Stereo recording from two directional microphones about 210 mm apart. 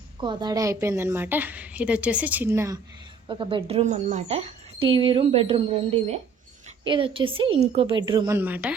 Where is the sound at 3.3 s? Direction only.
25° right (ahead or behind).